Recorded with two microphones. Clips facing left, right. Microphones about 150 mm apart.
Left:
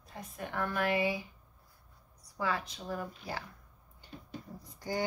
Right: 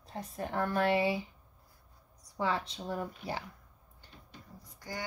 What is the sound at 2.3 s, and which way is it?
Speech, 25° right (ahead or behind).